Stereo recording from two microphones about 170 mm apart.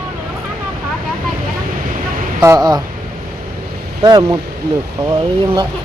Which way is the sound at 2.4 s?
20° right (ahead or behind).